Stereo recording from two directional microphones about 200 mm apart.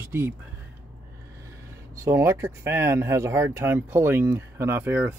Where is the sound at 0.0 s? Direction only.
10° right (ahead or behind).